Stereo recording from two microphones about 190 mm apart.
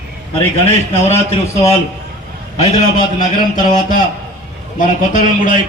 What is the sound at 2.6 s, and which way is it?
A man's voice, 40° left (ahead or behind).